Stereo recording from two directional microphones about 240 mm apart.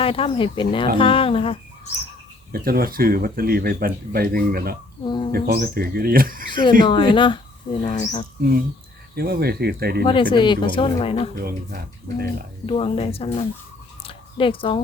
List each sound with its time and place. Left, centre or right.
0.0 s speech: left
2.5 s speech: right
5.0 s speech: centre
5.3 s speech: right
6.8 s speech: centre
8.4 s speech: right
10.3 s speech: centre
11.3 s speech: right
12.6 s speech: left
14.0 s a sound: left